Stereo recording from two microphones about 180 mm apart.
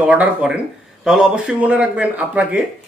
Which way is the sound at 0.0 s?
5° right (ahead or behind).